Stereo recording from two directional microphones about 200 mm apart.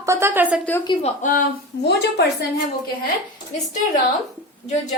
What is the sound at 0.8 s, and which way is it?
Speech, 35° left (ahead or behind).